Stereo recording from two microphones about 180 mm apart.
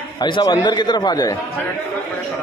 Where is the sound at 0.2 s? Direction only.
25° left (ahead or behind).